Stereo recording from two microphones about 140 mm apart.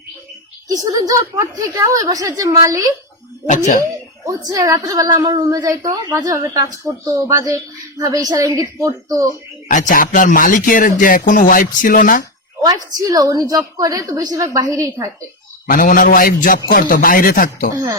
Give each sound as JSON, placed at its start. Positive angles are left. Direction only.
{"t": 0.7, "sound": "a woman's voice", "side_deg": -25}
{"t": 3.4, "sound": "speech", "side_deg": 65}
{"t": 4.3, "sound": "a woman's voice", "side_deg": -30}
{"t": 9.6, "sound": "speech", "side_deg": 65}
{"t": 12.6, "sound": "a woman's voice", "side_deg": -25}
{"t": 15.6, "sound": "a man's voice", "side_deg": 75}